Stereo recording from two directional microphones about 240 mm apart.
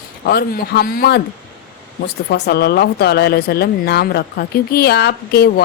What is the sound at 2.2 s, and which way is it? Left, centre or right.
A woman's voice, left.